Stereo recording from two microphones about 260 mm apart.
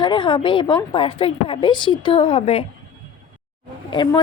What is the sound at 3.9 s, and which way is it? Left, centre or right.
Speech, centre.